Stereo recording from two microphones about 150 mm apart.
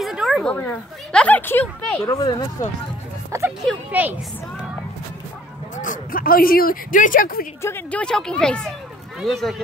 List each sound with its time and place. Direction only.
0.0 s a woman's voice: centre (ahead or behind)
2.0 s speech: 30° left (ahead or behind)
3.3 s music: 20° right (ahead or behind)
3.9 s speech: 10° right (ahead or behind)
5.8 s speech: 65° left (ahead or behind)
7.6 s speech: 10° left (ahead or behind)